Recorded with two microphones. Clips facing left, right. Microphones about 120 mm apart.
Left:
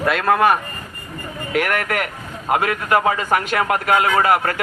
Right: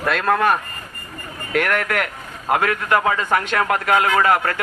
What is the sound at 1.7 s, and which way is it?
Speech, 55° left (ahead or behind).